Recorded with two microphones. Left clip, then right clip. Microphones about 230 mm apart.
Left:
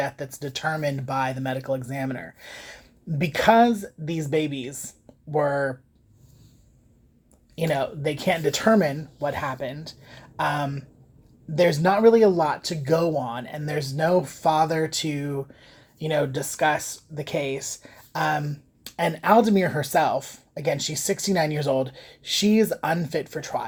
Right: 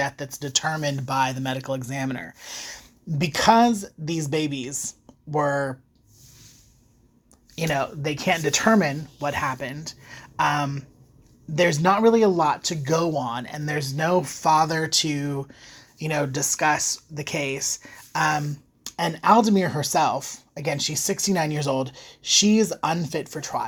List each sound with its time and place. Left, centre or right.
0.0 s speech: right
7.5 s speech: right